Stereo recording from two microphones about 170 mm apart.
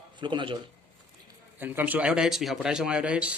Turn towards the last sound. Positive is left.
turn(degrees=-5)  # may be behind; listen again after turning